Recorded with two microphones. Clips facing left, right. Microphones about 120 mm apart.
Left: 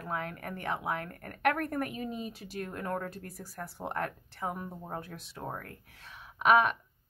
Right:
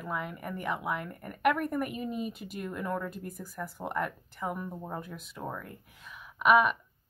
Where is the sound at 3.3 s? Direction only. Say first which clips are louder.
Right 2 dB; 35° left (ahead or behind).